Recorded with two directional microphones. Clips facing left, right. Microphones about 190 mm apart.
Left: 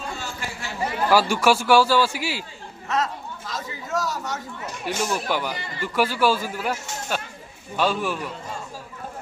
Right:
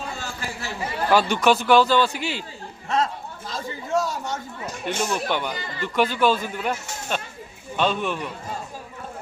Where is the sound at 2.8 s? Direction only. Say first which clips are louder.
Right 1 dB; 30° right (ahead or behind).